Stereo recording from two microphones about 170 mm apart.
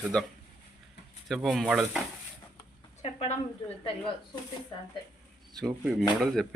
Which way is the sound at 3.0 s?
40° left (ahead or behind).